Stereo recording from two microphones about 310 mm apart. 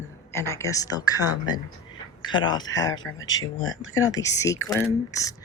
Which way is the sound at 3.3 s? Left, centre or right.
Left.